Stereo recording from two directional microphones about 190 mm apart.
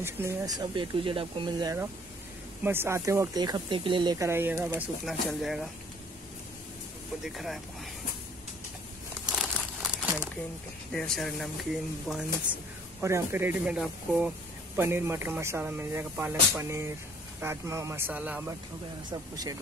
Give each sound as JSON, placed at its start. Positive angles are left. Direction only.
{"t": 0.0, "sound": "speech", "side_deg": -15}
{"t": 7.2, "sound": "speech", "side_deg": 0}
{"t": 9.3, "sound": "crumpling", "side_deg": -5}
{"t": 10.9, "sound": "speech", "side_deg": 5}